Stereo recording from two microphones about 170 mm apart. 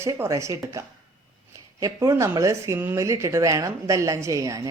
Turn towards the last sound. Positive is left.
turn(degrees=-20)  # may be behind; listen again after turning